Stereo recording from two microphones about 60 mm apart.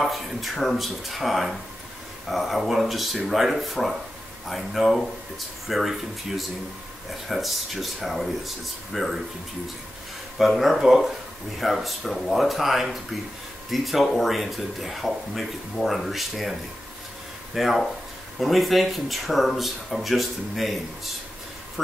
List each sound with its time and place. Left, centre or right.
0.0 s speech: centre
10.3 s speech: centre
17.6 s speech: centre